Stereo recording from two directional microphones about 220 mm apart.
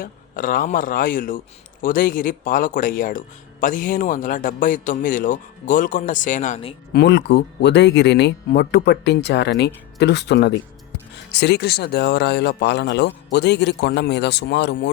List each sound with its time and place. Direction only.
0.0 s speech: 40° left (ahead or behind)
6.9 s speech: 50° left (ahead or behind)